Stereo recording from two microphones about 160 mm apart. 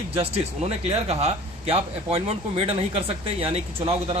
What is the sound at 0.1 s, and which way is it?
A man's voice, 40° right (ahead or behind).